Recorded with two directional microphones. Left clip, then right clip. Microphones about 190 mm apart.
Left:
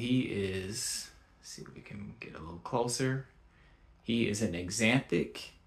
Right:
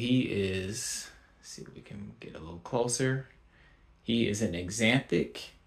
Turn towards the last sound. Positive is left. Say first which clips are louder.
# right 2 dB
turn(degrees=-15)  # may be behind; listen again after turning